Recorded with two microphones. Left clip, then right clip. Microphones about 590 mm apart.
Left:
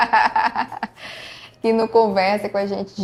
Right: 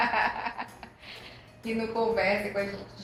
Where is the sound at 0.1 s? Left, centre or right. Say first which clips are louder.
Left 12 dB; left.